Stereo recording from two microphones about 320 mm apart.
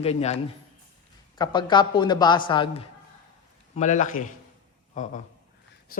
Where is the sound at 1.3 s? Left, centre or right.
Centre.